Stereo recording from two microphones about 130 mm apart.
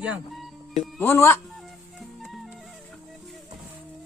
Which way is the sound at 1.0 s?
20° left (ahead or behind).